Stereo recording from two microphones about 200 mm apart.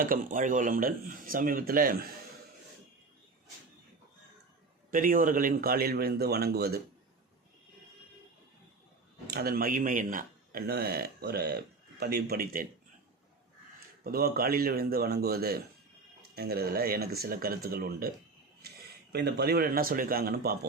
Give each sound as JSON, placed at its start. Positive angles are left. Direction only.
{"t": 0.0, "sound": "speech", "side_deg": -40}
{"t": 4.9, "sound": "speech", "side_deg": -45}
{"t": 9.2, "sound": "speech", "side_deg": -50}
{"t": 14.0, "sound": "speech", "side_deg": -50}
{"t": 19.1, "sound": "speech", "side_deg": -50}